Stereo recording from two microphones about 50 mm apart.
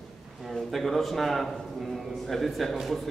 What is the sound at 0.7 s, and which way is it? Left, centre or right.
A man's voice, centre.